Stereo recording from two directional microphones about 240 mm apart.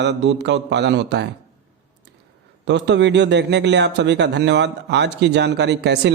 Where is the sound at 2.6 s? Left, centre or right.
Right.